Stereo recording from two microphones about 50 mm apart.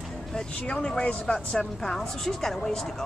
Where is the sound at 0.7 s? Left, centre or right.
Centre.